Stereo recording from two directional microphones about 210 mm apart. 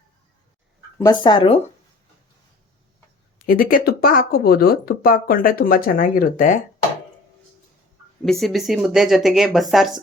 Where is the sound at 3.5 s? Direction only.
40° left (ahead or behind).